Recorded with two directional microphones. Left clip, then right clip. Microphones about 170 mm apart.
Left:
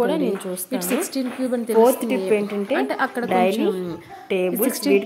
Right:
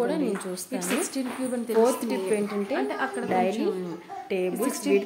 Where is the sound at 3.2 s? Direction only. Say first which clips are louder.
Left 6 dB; 20° left (ahead or behind).